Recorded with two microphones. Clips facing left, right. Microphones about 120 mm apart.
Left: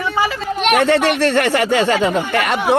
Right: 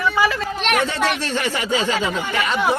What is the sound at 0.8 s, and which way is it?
Speech, 65° left (ahead or behind).